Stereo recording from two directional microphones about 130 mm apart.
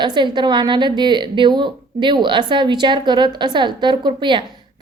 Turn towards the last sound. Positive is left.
turn(degrees=-40)  # may be behind; listen again after turning